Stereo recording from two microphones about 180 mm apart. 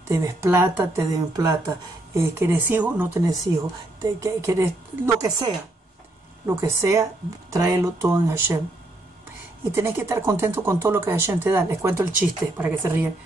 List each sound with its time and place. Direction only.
0.1 s speech: 15° right (ahead or behind)
9.7 s speech: 15° right (ahead or behind)